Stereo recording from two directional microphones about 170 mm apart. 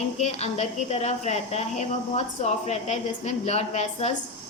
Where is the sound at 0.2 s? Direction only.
40° left (ahead or behind).